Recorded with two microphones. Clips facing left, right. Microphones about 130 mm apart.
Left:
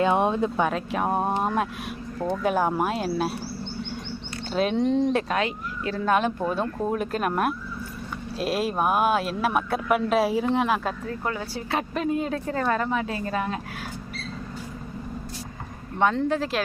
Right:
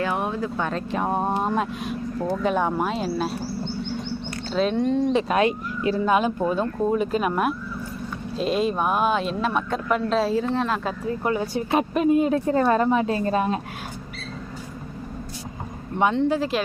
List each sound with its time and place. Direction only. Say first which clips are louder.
0.0 s speech: left 4 dB; 20° left (ahead or behind)
0.6 s speech: left 1 dB; 5° left (ahead or behind)
4.5 s speech: right 1 dB; 5° left (ahead or behind)
5.3 s speech: right 5 dB; 20° right (ahead or behind); by 10.8 s 15° left (ahead or behind)
11.2 s speech: right 6 dB; 20° right (ahead or behind)
16.1 s speech: right 3 dB; centre (ahead or behind)